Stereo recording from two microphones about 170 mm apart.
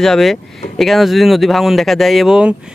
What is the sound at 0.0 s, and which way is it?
Speech, centre (ahead or behind).